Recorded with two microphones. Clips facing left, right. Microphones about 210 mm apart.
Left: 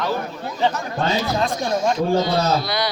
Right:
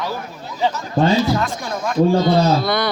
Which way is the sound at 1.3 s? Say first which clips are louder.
Left 1 dB; 25° left (ahead or behind).